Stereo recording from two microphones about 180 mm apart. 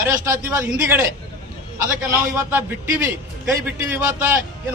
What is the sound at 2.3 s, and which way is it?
A man's voice, 10° right (ahead or behind).